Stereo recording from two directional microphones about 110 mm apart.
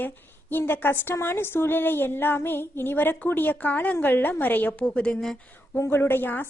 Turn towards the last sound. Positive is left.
turn(degrees=15)  # may be behind; listen again after turning